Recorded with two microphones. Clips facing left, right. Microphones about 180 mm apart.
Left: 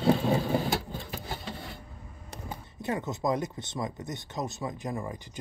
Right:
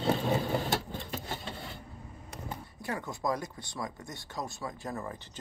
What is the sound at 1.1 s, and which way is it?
Rub, 5° left (ahead or behind).